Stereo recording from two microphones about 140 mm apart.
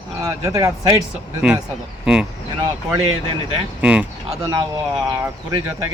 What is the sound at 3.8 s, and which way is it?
Speech, 5° right (ahead or behind).